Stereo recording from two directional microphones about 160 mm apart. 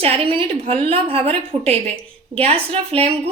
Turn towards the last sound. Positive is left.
turn(degrees=-40)  # may be behind; listen again after turning